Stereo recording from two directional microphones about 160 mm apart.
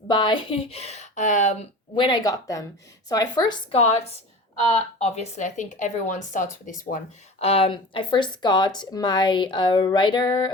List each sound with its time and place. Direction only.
0.1 s speech: 30° left (ahead or behind); by 1.5 s 50° left (ahead or behind)
2.0 s speech: 30° left (ahead or behind)
3.8 s speech: 40° left (ahead or behind)
7.3 s speech: 40° left (ahead or behind)